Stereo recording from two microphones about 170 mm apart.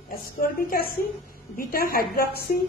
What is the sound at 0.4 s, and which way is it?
A woman's voice, 55° left (ahead or behind).